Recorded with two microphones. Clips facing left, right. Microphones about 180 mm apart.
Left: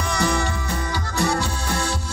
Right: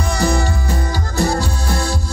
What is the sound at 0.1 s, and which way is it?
Music, 35° right (ahead or behind).